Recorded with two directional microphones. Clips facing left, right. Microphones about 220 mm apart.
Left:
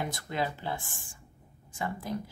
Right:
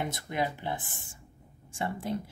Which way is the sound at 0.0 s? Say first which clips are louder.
Right 1 dB; 20° right (ahead or behind).